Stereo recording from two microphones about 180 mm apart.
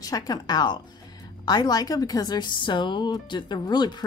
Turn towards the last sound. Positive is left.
turn(degrees=25)  # may be behind; listen again after turning